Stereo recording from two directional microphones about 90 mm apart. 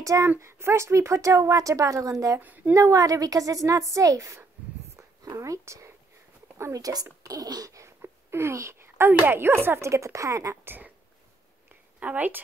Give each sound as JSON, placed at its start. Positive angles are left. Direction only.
{"t": 0.0, "sound": "speech", "side_deg": -35}
{"t": 2.4, "sound": "a woman's voice", "side_deg": -20}
{"t": 2.7, "sound": "speech", "side_deg": -35}
{"t": 4.6, "sound": "a sound", "side_deg": -15}
{"t": 4.9, "sound": "a sound", "side_deg": -40}
{"t": 6.6, "sound": "speech", "side_deg": -40}
{"t": 12.0, "sound": "a woman's voice", "side_deg": -20}